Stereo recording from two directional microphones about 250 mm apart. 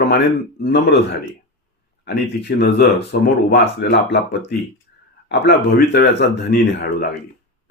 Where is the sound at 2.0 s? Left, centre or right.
Left.